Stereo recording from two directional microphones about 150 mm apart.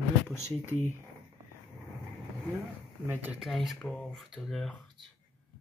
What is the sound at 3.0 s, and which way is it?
Speech, 10° right (ahead or behind).